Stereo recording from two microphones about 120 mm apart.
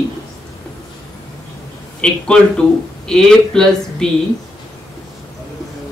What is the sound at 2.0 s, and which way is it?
Speech, 10° left (ahead or behind).